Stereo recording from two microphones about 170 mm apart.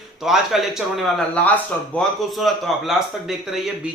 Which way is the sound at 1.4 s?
10° left (ahead or behind).